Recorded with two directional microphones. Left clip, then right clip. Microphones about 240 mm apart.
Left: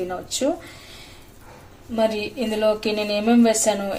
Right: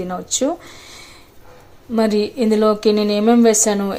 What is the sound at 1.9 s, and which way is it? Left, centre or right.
Speech, right.